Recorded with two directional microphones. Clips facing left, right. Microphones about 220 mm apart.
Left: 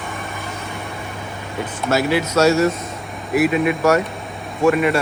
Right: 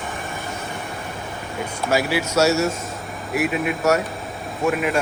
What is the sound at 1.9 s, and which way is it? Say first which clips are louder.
Speech: left 3 dB; 10° right (ahead or behind).